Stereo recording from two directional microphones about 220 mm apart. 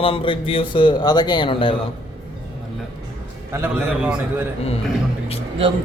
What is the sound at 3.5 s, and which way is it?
Speech, 10° right (ahead or behind).